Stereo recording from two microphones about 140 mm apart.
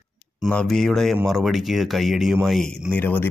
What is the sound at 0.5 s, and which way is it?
Speech, centre (ahead or behind).